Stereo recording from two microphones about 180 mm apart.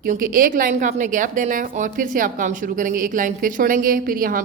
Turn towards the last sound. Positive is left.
turn(degrees=-50)  # may be behind; listen again after turning